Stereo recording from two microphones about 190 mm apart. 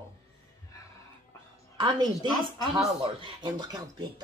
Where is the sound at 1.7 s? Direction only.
20° right (ahead or behind).